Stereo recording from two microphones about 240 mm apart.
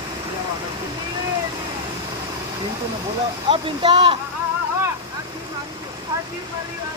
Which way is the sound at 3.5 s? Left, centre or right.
Right.